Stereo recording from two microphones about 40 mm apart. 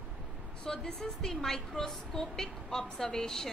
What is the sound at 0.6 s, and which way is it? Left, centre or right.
A woman's voice, centre.